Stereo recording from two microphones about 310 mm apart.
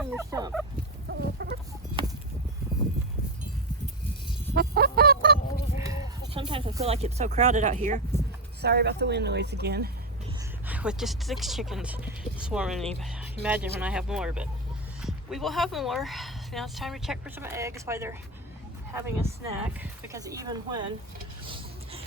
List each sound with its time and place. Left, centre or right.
0.0 s fowl: centre
1.0 s chicken: right
4.5 s goose: right
5.8 s a sound: centre
8.6 s speech: right
10.7 s speech: centre
21.4 s mechanisms: centre